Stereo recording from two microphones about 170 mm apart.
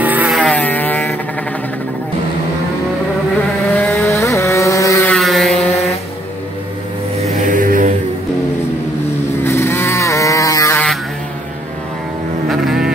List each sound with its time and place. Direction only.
0.0 s vehicle: 10° right (ahead or behind)
0.6 s vehicle: 10° left (ahead or behind)
3.7 s vehicle: 10° left (ahead or behind)
5.1 s vehicle: centre (ahead or behind)
7.4 s music: 55° right (ahead or behind)
9.4 s vehicle: 15° left (ahead or behind)
12.4 s vehicle: centre (ahead or behind)